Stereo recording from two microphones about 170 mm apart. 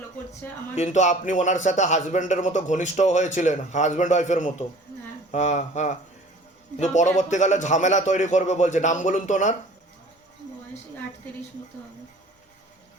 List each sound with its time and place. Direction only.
0.8 s a man's voice: 45° left (ahead or behind)